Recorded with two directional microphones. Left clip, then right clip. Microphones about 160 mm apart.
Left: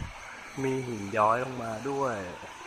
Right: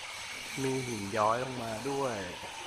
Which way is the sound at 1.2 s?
25° left (ahead or behind).